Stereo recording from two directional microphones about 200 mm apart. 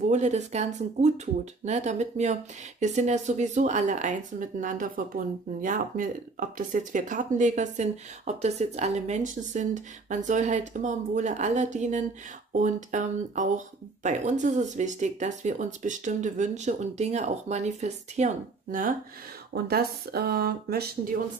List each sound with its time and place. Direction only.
0.0 s speech: 35° right (ahead or behind)